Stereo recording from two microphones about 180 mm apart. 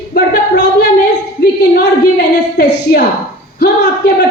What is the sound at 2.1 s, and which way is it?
Speech, 60° left (ahead or behind).